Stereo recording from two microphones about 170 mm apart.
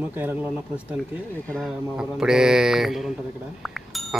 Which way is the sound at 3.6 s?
Centre (ahead or behind).